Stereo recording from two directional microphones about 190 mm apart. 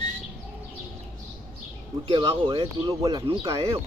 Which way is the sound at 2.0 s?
25° right (ahead or behind).